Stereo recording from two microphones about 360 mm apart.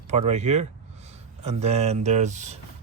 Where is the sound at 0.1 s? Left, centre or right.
Centre.